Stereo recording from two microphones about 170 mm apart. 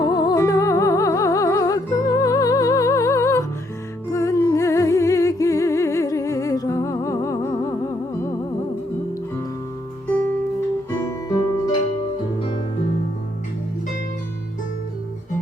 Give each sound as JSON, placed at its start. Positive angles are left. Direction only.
{"t": 0.0, "sound": "music", "side_deg": 25}
{"t": 11.3, "sound": "music", "side_deg": 20}